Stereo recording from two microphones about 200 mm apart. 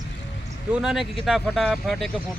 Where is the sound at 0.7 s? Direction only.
Centre (ahead or behind).